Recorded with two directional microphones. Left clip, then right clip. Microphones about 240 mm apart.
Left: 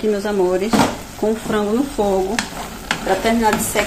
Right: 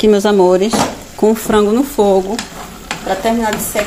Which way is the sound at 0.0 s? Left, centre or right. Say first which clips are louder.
Right 8 dB; right.